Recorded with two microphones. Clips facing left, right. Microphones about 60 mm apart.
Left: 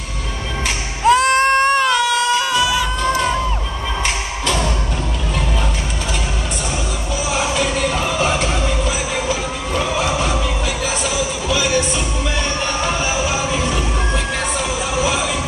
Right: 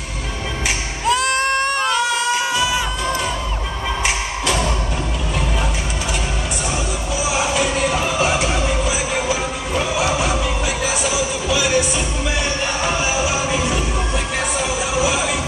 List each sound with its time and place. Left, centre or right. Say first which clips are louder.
1.0 s music: left 5 dB; left
2.0 s music: left 2 dB; right
4.0 s music: even; centre
7.2 s music: even; centre